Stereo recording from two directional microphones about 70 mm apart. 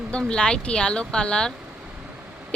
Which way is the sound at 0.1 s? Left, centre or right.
Centre.